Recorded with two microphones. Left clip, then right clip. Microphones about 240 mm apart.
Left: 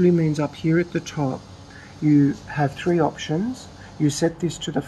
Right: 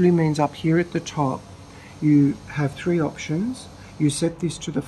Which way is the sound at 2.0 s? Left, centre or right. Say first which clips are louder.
Even; centre.